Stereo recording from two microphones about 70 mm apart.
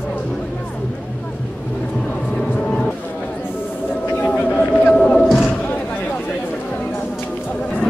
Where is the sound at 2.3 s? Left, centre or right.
Centre.